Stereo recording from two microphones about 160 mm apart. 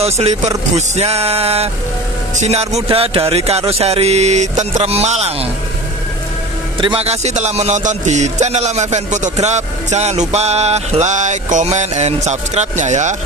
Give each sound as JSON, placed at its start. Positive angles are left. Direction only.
{"t": 0.0, "sound": "a man's voice", "side_deg": -45}
{"t": 6.8, "sound": "a man's voice", "side_deg": -35}